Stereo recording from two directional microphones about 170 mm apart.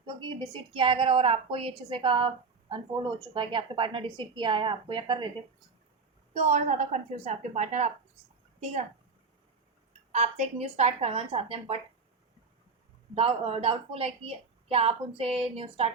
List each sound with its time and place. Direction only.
0.0 s a woman's voice: 25° right (ahead or behind)
6.3 s a woman's voice: 40° right (ahead or behind)
10.1 s a woman's voice: 40° right (ahead or behind)
13.1 s a woman's voice: 35° right (ahead or behind)